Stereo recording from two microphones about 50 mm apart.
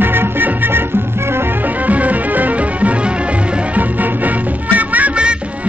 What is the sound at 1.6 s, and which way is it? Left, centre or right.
Music, right.